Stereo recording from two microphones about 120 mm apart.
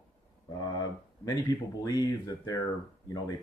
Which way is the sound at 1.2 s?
30° left (ahead or behind).